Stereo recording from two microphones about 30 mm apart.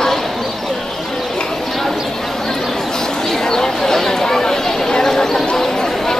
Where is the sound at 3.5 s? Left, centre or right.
Centre.